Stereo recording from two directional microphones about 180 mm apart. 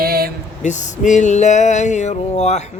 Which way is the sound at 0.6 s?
45° left (ahead or behind).